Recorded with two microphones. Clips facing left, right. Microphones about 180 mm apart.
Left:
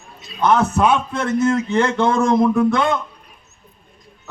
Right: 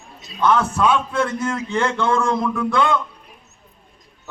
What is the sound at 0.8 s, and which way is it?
A man's voice, 20° left (ahead or behind).